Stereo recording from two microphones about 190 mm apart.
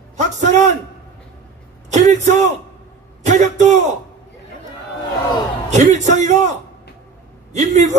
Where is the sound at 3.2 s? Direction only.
40° right (ahead or behind).